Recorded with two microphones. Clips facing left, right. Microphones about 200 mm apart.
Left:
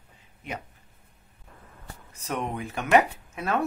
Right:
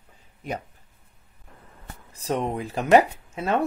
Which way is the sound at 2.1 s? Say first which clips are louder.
Right 5 dB; 35° right (ahead or behind).